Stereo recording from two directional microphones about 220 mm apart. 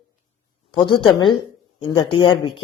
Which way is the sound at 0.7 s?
20° left (ahead or behind).